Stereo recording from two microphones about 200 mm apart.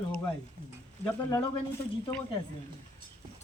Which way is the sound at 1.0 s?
15° left (ahead or behind).